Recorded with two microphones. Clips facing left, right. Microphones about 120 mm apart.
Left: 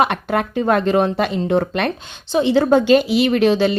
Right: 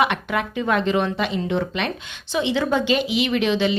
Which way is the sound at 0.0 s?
40° left (ahead or behind).